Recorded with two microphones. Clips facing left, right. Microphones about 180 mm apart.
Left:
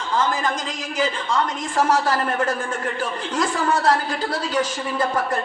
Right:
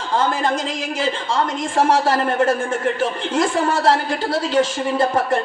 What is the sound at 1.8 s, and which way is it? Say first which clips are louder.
A woman's voice: right 3 dB; 30° right (ahead or behind).